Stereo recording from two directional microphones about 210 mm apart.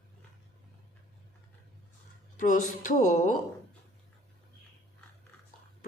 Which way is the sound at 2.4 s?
40° left (ahead or behind).